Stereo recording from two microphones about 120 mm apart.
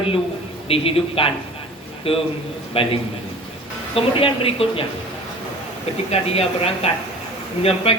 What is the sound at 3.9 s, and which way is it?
Speech, 50° left (ahead or behind).